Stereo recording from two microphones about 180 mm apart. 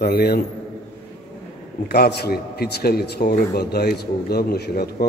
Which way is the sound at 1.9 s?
60° left (ahead or behind).